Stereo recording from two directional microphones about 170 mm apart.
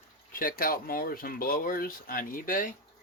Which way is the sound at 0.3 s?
55° left (ahead or behind).